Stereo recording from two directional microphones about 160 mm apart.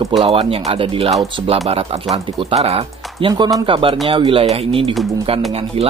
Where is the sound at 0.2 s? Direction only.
35° right (ahead or behind).